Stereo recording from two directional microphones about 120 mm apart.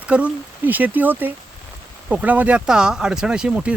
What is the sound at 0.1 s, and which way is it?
Speech, 10° right (ahead or behind).